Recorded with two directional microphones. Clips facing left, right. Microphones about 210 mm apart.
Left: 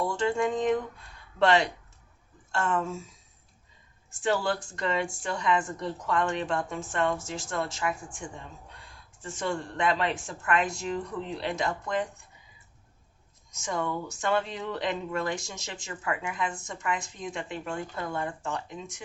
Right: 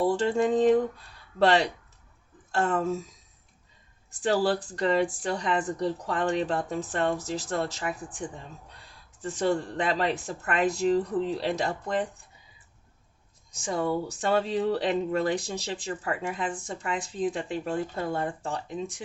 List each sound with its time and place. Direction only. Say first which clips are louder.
0.0 s speech: right 3 dB; 35° right (ahead or behind)
4.2 s speech: right 3 dB; 35° right (ahead or behind)
9.2 s speech: right 6 dB; 35° right (ahead or behind)
13.5 s speech: right 4 dB; 35° right (ahead or behind)